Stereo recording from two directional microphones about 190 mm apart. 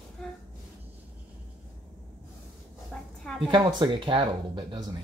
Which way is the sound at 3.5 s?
25° right (ahead or behind).